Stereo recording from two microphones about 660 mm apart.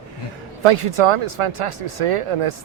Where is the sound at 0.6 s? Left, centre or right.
Right.